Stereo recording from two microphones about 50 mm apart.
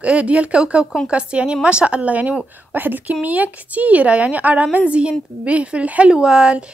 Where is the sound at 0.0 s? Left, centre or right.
Right.